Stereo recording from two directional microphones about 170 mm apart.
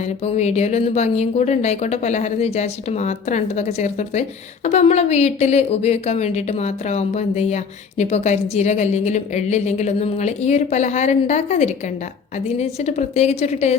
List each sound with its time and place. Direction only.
0.3 s a woman's voice: 40° left (ahead or behind)